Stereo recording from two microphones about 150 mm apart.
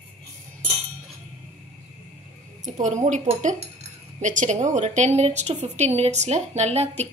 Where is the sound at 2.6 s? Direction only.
55° right (ahead or behind).